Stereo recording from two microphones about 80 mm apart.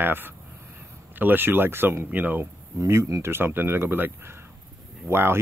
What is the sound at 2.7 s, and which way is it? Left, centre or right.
Speech, right.